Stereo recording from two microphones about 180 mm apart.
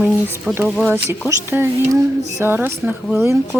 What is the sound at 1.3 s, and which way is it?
Speech, 15° right (ahead or behind).